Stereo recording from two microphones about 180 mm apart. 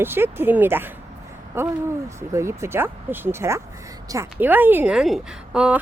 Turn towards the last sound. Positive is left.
turn(degrees=-5)  # may be behind; listen again after turning